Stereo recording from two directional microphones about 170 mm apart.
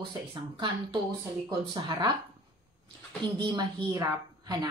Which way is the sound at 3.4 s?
20° right (ahead or behind).